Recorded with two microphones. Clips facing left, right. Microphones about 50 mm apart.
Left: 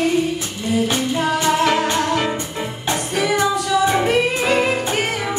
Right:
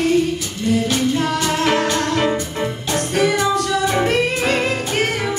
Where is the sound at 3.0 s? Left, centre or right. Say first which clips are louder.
Right 2 dB; right.